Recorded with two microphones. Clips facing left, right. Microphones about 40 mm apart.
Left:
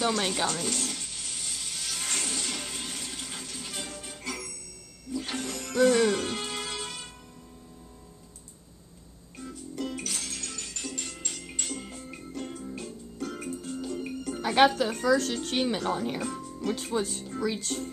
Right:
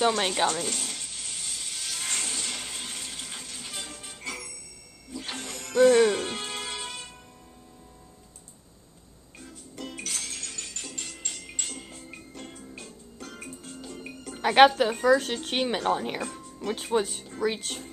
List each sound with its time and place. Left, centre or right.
0.5 s music: centre
9.4 s music: centre
14.4 s music: right
14.9 s a woman's voice: right
16.2 s music: centre
16.6 s speech: right
16.9 s a woman's voice: right